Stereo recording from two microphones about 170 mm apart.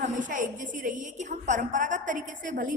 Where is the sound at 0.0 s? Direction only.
50° right (ahead or behind).